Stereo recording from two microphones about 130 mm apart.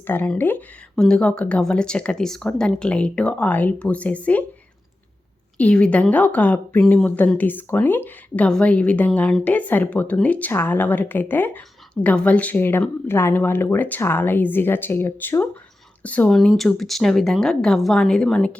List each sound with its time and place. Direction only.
0.0 s a woman's voice: 15° left (ahead or behind)
5.5 s a woman's voice: 10° left (ahead or behind)